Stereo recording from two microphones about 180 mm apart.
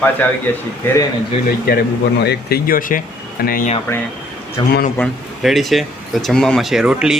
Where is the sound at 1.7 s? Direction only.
60° left (ahead or behind).